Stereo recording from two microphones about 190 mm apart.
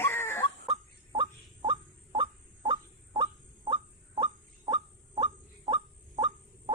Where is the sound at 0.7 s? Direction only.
25° right (ahead or behind).